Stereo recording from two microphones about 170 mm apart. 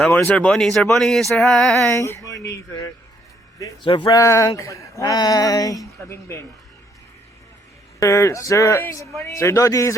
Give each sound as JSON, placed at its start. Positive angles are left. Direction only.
{"t": 0.1, "sound": "speech", "side_deg": 10}
{"t": 1.9, "sound": "speech", "side_deg": 15}
{"t": 3.8, "sound": "speech", "side_deg": 25}
{"t": 7.9, "sound": "a man's voice", "side_deg": 15}